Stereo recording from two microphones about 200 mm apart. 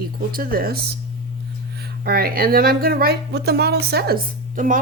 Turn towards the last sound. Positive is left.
turn(degrees=-40)  # may be behind; listen again after turning